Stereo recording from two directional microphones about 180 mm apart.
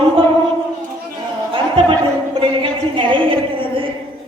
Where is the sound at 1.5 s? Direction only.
30° right (ahead or behind).